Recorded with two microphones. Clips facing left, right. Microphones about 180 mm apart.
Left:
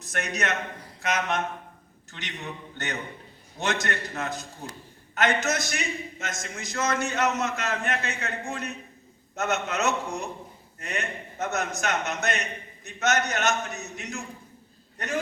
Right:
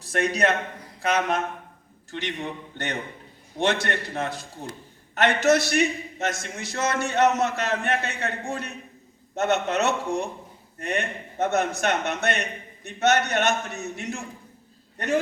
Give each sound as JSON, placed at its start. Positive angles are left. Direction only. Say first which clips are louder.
{"t": 0.0, "sound": "a man's voice", "louder": "right 7 dB", "side_deg": -30}